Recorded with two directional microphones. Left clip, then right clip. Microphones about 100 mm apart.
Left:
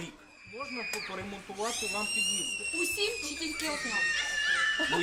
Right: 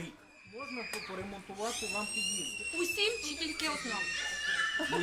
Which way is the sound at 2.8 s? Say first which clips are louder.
Right 1 dB; 30° right (ahead or behind).